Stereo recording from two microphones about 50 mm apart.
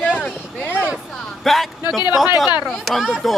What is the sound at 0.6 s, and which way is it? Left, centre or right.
Speech, left.